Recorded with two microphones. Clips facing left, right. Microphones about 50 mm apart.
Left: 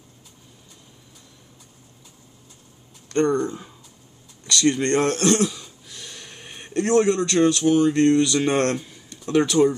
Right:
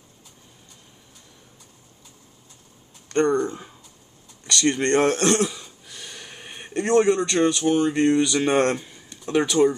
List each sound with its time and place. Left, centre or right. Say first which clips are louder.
3.1 s speech: even; centre